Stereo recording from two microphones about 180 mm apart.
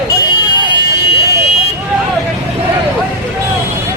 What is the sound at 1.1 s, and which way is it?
Vehicle, 30° left (ahead or behind).